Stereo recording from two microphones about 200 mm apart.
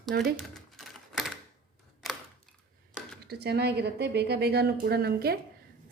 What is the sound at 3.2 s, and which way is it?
A woman's voice, 55° right (ahead or behind).